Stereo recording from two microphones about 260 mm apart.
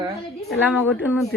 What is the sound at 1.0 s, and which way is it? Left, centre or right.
Speech, centre.